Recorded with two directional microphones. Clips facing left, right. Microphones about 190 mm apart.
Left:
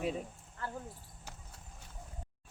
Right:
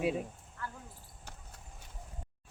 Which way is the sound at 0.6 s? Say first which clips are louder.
Left 2 dB; 30° left (ahead or behind).